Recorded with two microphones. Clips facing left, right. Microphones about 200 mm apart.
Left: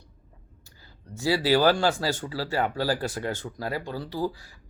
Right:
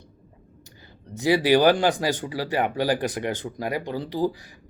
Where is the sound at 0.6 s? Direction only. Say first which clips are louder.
Right 5 dB; 20° right (ahead or behind).